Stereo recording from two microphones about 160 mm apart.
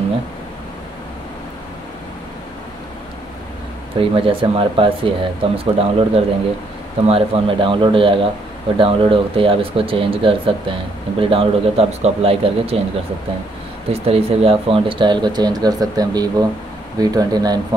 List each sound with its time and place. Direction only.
4.0 s speech: 35° right (ahead or behind)
13.9 s speech: 40° right (ahead or behind)